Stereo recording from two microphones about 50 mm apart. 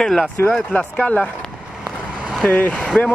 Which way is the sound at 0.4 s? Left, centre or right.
Left.